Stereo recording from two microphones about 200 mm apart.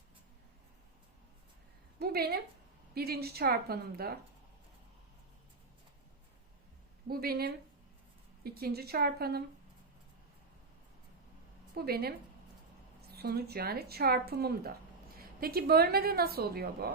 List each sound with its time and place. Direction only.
2.0 s speech: 50° right (ahead or behind)
7.1 s speech: 50° right (ahead or behind)
11.7 s speech: 50° right (ahead or behind)